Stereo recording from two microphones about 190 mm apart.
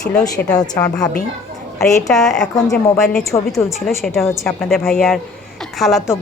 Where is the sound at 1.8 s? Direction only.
Centre (ahead or behind).